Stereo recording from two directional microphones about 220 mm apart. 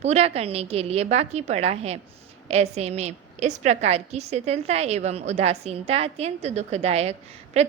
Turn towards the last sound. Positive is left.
turn(degrees=-30)  # may be behind; listen again after turning